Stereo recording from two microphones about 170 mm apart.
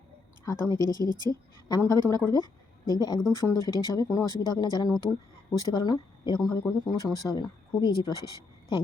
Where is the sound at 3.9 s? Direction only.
20° left (ahead or behind).